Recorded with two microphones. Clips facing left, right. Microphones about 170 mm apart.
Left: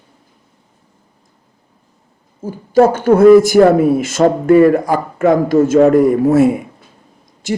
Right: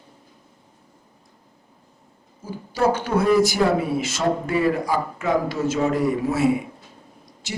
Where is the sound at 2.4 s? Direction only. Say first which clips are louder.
Left 10 dB; 50° left (ahead or behind).